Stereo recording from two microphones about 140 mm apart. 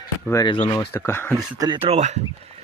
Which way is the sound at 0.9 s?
15° left (ahead or behind).